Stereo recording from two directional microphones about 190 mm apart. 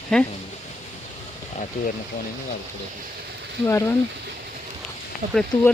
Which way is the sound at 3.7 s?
15° left (ahead or behind).